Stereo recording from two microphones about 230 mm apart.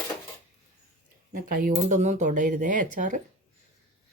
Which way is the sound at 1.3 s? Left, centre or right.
Right.